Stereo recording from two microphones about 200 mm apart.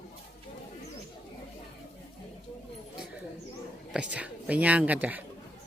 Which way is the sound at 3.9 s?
5° right (ahead or behind).